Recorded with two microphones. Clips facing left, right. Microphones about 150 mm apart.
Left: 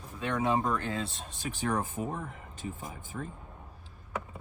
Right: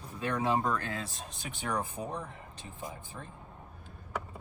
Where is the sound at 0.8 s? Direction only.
25° left (ahead or behind); by 2.3 s 45° left (ahead or behind).